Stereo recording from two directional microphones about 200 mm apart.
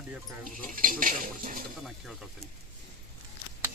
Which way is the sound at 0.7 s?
45° right (ahead or behind).